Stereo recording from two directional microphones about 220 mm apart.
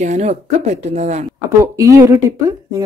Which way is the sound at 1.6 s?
15° right (ahead or behind).